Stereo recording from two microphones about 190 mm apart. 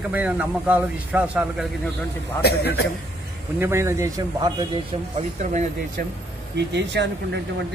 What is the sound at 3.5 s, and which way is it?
Speech, 10° right (ahead or behind).